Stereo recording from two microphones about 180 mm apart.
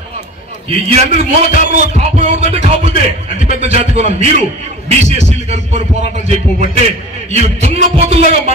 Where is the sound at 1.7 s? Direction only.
40° right (ahead or behind).